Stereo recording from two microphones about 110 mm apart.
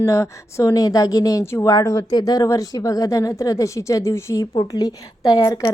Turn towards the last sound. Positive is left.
turn(degrees=25)  # may be behind; listen again after turning